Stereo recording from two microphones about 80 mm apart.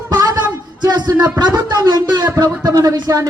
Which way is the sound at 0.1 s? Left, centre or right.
Right.